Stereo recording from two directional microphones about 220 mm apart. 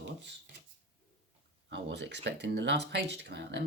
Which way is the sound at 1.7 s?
50° right (ahead or behind).